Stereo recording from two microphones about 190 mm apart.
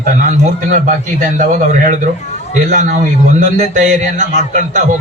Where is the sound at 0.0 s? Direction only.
40° right (ahead or behind).